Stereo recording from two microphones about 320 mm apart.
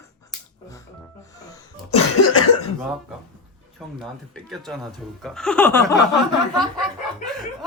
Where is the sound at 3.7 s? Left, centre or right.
Centre.